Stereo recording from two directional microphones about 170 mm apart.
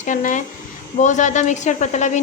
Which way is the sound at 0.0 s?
50° left (ahead or behind).